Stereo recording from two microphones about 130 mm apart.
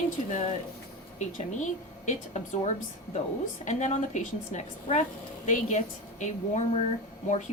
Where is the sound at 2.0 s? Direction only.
65° left (ahead or behind).